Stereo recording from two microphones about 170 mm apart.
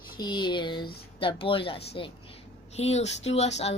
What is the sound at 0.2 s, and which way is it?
Speech, 25° left (ahead or behind).